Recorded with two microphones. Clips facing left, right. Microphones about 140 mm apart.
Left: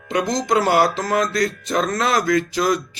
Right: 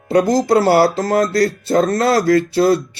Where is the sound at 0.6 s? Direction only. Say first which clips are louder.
Right 2 dB; 30° right (ahead or behind).